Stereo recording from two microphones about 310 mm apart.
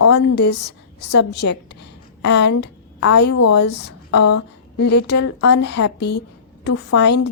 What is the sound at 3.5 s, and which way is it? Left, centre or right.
A woman's voice, left.